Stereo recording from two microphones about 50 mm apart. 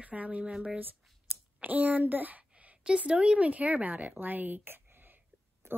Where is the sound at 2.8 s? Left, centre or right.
Centre.